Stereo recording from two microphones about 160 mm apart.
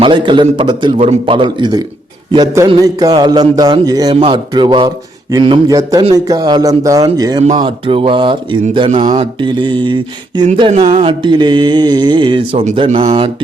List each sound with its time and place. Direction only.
0.0 s a man's voice: 30° right (ahead or behind)
7.6 s mantra: 35° right (ahead or behind)
9.4 s a man's voice: 30° right (ahead or behind)
10.7 s mantra: 35° right (ahead or behind)